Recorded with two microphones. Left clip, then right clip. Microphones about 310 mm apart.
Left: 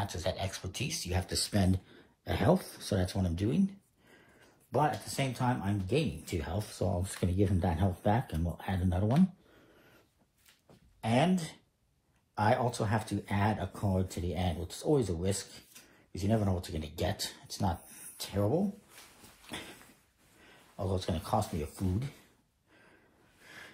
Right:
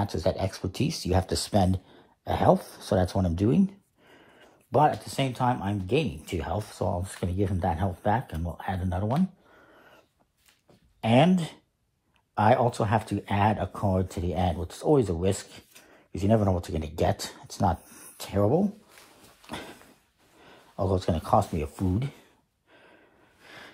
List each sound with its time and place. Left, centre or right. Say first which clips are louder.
0.0 s speech: right 8 dB; centre
4.6 s speech: right 8 dB; right
11.0 s speech: right 8 dB; right
12.8 s speech: right 7 dB; centre
20.7 s speech: right 8 dB; right